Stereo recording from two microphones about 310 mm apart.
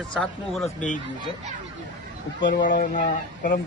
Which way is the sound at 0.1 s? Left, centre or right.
Centre.